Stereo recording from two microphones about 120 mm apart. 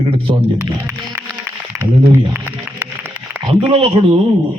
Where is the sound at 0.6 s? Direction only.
30° right (ahead or behind).